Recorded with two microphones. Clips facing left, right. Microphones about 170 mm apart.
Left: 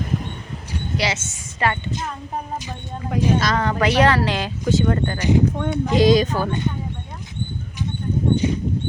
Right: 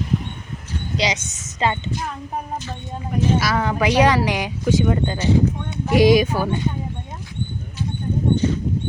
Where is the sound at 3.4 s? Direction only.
10° right (ahead or behind).